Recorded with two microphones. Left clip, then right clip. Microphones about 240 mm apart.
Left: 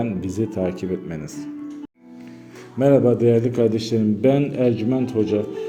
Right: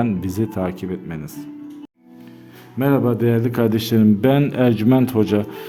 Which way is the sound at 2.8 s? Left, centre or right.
Centre.